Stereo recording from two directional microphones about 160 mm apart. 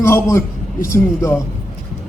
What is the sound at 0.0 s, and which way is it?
A man's voice, 15° left (ahead or behind).